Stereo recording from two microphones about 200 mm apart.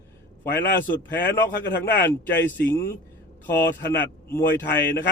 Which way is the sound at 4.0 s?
10° left (ahead or behind).